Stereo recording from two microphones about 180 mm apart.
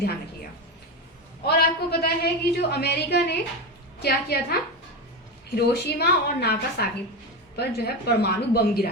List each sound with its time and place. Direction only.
1.5 s a man's voice: 60° left (ahead or behind)
5.5 s a man's voice: 65° left (ahead or behind)